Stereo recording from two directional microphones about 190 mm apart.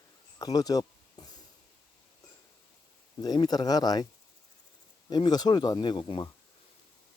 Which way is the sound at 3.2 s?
20° left (ahead or behind).